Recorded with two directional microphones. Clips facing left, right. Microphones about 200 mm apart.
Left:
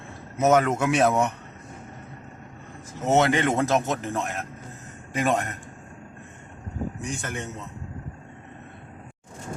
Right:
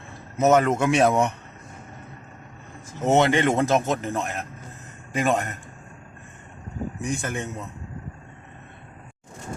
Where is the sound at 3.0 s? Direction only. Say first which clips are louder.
Right 2 dB; centre (ahead or behind).